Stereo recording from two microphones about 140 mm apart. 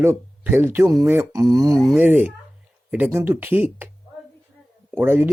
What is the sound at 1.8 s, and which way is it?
Speech, centre (ahead or behind).